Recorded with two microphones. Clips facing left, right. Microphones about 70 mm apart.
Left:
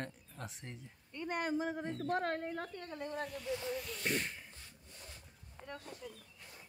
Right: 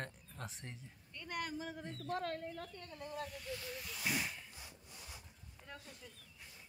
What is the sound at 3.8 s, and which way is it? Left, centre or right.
Speech, centre.